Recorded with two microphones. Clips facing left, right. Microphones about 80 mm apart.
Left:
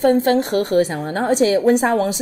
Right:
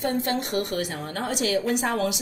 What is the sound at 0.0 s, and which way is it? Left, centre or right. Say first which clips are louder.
A woman's voice: left 11 dB; left.